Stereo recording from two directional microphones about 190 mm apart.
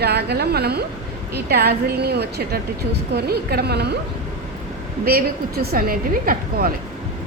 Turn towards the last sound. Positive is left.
turn(degrees=-50)  # may be behind; listen again after turning